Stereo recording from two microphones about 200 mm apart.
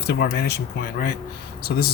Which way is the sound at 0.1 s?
55° left (ahead or behind).